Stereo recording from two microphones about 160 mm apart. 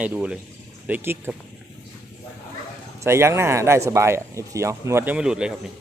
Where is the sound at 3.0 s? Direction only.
15° right (ahead or behind).